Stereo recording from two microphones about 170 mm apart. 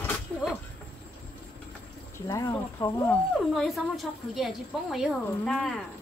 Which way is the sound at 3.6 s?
Centre (ahead or behind).